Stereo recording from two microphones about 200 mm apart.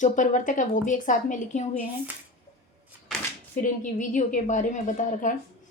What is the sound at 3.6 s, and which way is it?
A woman's voice, 40° left (ahead or behind).